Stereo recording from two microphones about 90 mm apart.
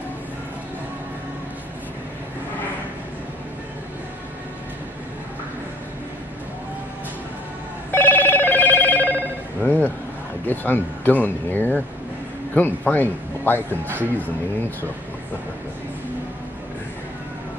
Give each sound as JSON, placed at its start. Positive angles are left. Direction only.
{"t": 7.9, "sound": "telephone bell ringing", "side_deg": 20}
{"t": 10.4, "sound": "speech", "side_deg": 20}